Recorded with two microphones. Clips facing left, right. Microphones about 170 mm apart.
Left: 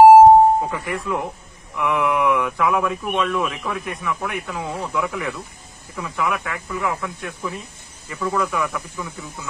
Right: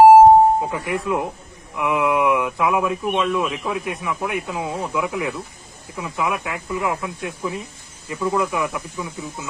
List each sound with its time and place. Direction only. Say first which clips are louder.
0.7 s speech: right 2 dB; 20° right (ahead or behind)